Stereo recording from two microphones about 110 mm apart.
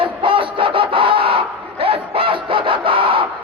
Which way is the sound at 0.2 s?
50° right (ahead or behind).